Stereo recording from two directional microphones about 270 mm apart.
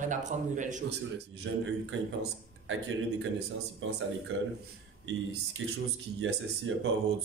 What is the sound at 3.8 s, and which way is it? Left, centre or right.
Speech, right.